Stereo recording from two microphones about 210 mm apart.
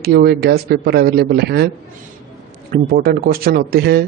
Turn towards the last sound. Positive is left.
turn(degrees=-50)  # may be behind; listen again after turning